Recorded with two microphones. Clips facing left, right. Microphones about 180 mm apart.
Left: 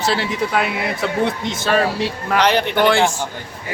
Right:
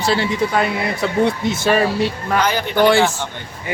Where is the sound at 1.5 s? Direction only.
10° right (ahead or behind).